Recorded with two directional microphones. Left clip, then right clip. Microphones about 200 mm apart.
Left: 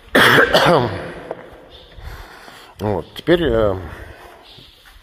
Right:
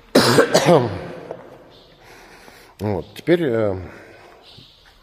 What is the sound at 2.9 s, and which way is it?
Speech, 5° right (ahead or behind).